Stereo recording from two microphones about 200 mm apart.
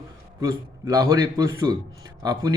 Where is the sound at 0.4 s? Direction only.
15° right (ahead or behind).